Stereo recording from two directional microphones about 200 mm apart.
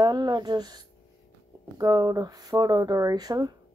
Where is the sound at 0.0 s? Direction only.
20° right (ahead or behind).